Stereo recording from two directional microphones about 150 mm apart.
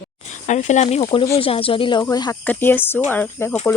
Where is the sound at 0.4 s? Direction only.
55° left (ahead or behind); by 2.3 s 25° left (ahead or behind).